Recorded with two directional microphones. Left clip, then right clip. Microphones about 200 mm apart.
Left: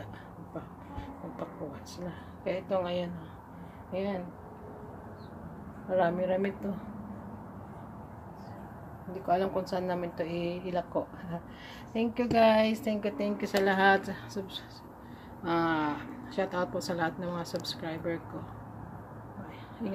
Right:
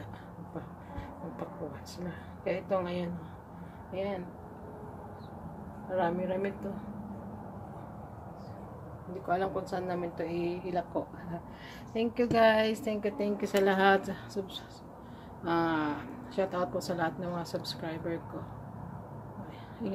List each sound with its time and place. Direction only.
2.0 s speech: 5° left (ahead or behind)
3.9 s speech: 30° left (ahead or behind)
5.9 s speech: 30° left (ahead or behind)
9.3 s speech: 15° left (ahead or behind)
11.9 s a woman's voice: 5° left (ahead or behind)